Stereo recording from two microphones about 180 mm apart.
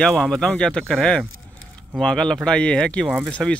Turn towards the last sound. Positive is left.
turn(degrees=5)  # may be behind; listen again after turning